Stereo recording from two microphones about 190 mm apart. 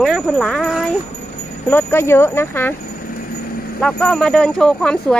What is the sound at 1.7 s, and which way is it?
Speech, 10° left (ahead or behind).